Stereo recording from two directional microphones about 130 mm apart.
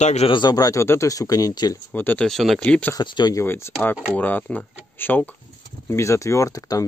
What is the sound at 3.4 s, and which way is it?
Speech, 20° left (ahead or behind).